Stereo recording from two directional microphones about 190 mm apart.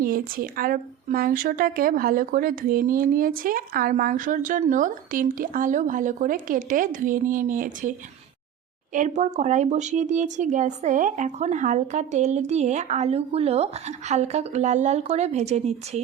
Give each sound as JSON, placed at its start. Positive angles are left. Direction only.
{"t": 0.0, "sound": "speech", "side_deg": -50}